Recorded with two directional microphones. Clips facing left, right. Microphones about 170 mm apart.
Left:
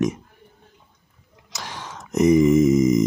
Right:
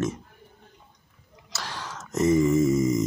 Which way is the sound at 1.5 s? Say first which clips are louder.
Left 1 dB; 15° left (ahead or behind).